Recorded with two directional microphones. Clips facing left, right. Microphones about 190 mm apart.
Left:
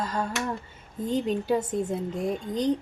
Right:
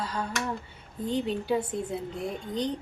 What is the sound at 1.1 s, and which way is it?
A woman's voice, 45° left (ahead or behind).